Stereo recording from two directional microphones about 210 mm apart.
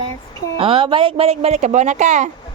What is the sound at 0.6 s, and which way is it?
Speech, 25° right (ahead or behind).